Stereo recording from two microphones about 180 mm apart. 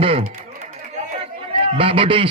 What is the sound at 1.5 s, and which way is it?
Speech, 30° right (ahead or behind).